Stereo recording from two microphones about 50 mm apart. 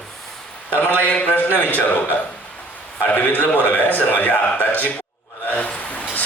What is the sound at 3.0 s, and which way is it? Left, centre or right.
A man's voice, left.